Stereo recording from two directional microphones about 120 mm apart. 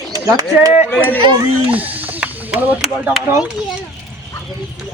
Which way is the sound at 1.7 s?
10° right (ahead or behind).